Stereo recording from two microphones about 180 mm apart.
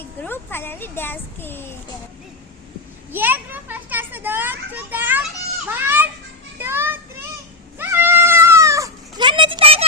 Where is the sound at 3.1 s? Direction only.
10° right (ahead or behind).